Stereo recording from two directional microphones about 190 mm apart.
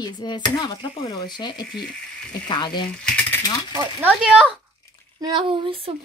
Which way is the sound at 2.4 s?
25° left (ahead or behind).